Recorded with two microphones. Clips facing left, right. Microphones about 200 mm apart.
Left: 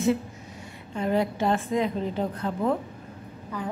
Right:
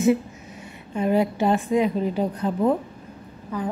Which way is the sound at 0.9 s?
15° right (ahead or behind).